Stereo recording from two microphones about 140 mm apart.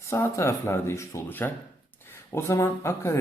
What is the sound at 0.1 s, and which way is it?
Speech, 20° left (ahead or behind).